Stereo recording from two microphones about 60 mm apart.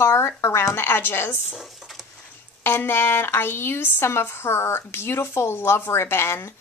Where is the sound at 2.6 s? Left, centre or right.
Left.